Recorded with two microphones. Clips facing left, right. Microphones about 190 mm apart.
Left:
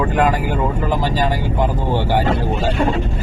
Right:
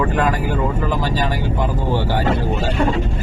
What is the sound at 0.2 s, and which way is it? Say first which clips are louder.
Speech: left 2 dB; 15° left (ahead or behind).